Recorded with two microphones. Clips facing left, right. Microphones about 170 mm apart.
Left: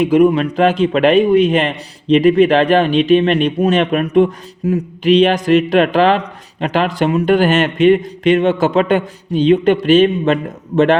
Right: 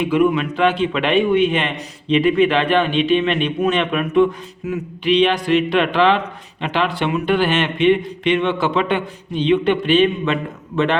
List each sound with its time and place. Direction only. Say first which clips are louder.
0.0 s a man's voice: left 5 dB; 40° left (ahead or behind)